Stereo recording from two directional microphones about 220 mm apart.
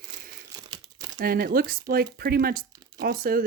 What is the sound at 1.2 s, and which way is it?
Speech, 40° right (ahead or behind).